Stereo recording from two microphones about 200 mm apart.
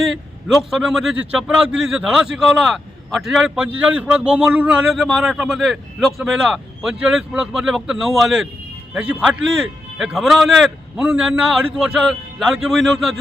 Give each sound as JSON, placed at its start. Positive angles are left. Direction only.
{"t": 0.0, "sound": "a man's voice", "side_deg": 0}